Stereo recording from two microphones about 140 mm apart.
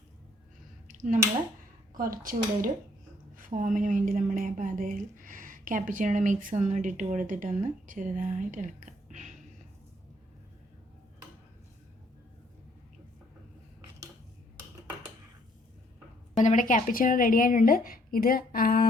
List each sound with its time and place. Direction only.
0.9 s a sound: 70° right (ahead or behind)
1.9 s speech: 80° right
3.3 s a woman's voice: 75° right (ahead or behind)
16.4 s speech: 65° left (ahead or behind); by 18.9 s 90° left